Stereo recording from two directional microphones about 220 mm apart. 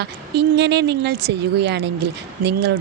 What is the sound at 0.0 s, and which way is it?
Speech, 50° right (ahead or behind).